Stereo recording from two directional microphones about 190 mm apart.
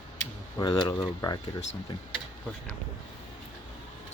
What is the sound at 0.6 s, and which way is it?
Speech, 20° left (ahead or behind).